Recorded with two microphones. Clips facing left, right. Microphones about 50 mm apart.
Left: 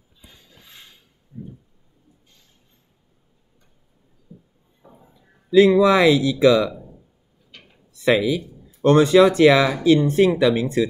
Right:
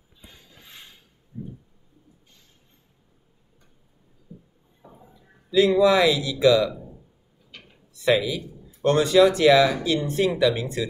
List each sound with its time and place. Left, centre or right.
5.5 s speech: left
8.0 s speech: left